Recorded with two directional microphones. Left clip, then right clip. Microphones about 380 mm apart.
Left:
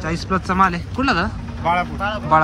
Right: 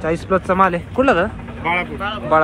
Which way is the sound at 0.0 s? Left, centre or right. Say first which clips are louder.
Right 4 dB; centre.